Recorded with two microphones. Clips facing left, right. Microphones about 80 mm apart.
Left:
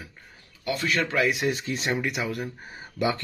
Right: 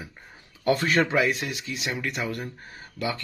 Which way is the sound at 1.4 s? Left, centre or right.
Left.